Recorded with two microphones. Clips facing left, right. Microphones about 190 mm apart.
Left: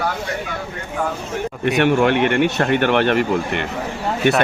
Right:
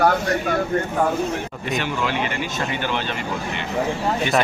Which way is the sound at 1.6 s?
70° left (ahead or behind).